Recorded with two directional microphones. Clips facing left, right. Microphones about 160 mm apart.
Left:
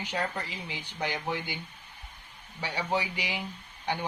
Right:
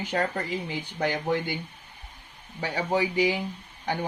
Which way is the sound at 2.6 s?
45° right (ahead or behind).